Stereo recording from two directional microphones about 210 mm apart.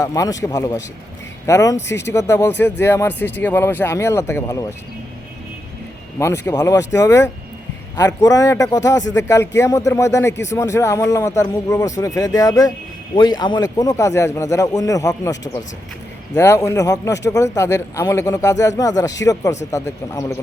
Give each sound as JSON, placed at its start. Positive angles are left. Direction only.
{"t": 0.0, "sound": "speech", "side_deg": 15}
{"t": 6.1, "sound": "speech", "side_deg": 15}